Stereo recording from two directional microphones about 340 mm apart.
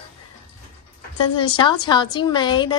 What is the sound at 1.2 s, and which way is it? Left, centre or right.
A woman's voice, centre.